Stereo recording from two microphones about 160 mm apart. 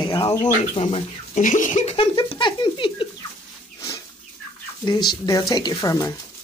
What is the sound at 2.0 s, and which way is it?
Speech, 35° left (ahead or behind).